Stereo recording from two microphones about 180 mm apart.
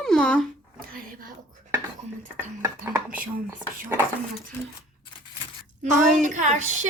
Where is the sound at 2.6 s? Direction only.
10° right (ahead or behind).